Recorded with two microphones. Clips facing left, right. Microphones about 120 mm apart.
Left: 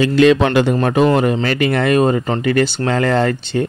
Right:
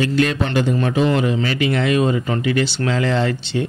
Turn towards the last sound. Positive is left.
turn(degrees=45)  # may be behind; listen again after turning